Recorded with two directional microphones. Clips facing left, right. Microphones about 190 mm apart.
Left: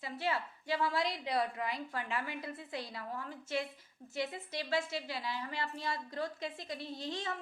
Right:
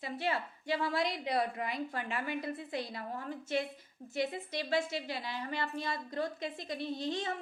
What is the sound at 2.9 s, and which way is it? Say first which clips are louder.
Speech: right 2 dB; 35° right (ahead or behind).